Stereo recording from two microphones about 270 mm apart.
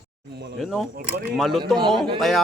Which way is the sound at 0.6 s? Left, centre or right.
Centre.